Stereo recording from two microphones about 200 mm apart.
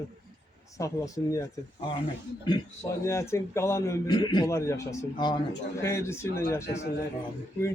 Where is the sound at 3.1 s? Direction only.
15° left (ahead or behind).